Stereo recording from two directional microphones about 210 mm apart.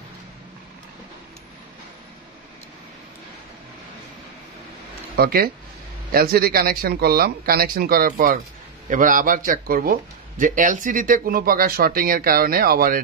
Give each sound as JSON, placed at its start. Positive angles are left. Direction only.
{"t": 5.1, "sound": "a man's voice", "side_deg": -45}